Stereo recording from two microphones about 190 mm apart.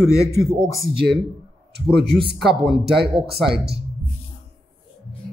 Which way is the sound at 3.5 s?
55° right (ahead or behind).